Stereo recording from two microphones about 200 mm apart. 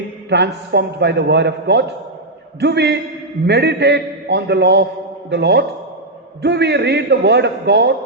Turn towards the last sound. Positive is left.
turn(degrees=-55)  # may be behind; listen again after turning